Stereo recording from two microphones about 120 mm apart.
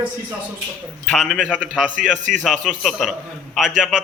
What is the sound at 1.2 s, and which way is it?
Speech, 5° left (ahead or behind).